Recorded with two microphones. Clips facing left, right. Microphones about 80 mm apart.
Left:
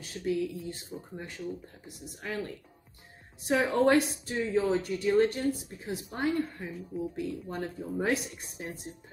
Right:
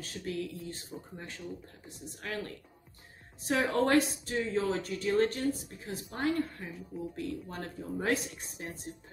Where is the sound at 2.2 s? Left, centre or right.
Centre.